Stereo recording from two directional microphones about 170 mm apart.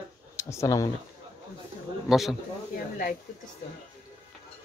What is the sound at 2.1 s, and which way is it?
Speech, centre (ahead or behind).